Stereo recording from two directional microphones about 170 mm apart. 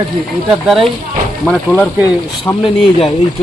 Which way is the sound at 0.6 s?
Centre (ahead or behind).